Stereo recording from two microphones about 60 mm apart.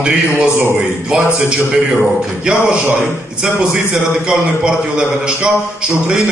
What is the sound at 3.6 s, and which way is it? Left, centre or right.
A man's voice, centre.